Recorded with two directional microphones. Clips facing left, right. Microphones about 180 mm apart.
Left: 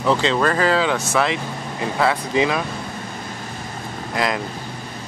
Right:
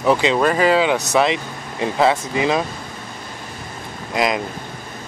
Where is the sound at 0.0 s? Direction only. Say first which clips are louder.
Right 2 dB; 15° right (ahead or behind).